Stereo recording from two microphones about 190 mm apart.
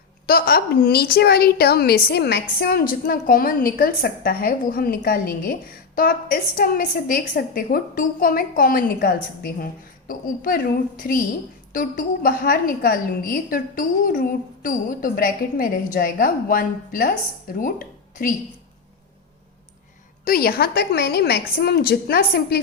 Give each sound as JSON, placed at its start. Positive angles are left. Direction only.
{"t": 0.3, "sound": "a woman's voice", "side_deg": 50}
{"t": 17.6, "sound": "a sound", "side_deg": 45}
{"t": 20.2, "sound": "a woman's voice", "side_deg": 50}